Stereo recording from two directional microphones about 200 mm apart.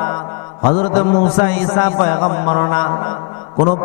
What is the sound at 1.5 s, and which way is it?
Speech, 15° left (ahead or behind).